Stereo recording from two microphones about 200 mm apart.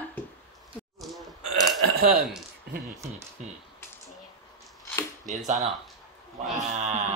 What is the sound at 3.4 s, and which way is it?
Speech, 35° right (ahead or behind).